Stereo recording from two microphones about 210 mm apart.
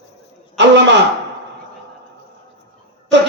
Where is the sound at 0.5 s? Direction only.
55° right (ahead or behind).